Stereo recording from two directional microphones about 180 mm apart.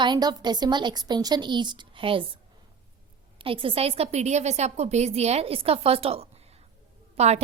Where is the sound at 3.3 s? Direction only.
30° right (ahead or behind).